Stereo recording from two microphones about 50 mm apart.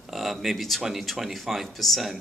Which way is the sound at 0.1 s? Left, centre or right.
Centre.